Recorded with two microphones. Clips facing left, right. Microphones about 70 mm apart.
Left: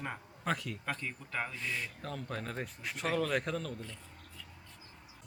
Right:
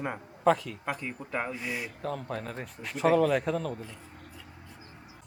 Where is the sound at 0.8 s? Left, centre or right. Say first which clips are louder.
Right 6 dB; centre.